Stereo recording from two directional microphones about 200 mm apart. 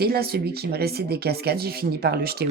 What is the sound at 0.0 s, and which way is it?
A child's voice, 50° right (ahead or behind).